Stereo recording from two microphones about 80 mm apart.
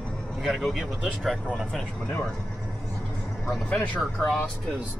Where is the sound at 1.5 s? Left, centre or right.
Centre.